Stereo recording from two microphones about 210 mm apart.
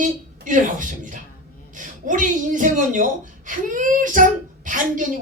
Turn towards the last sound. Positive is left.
turn(degrees=-40)  # may be behind; listen again after turning